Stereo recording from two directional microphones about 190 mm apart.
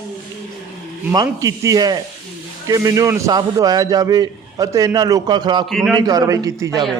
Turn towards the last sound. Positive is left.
turn(degrees=-15)  # may be behind; listen again after turning